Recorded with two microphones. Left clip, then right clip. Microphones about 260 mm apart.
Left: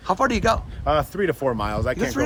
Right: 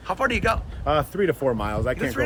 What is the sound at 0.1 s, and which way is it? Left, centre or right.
Speech, left.